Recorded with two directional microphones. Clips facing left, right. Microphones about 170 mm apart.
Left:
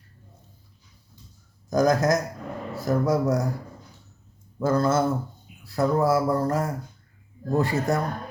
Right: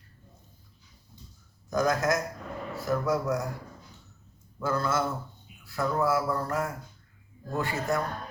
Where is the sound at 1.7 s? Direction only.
35° left (ahead or behind).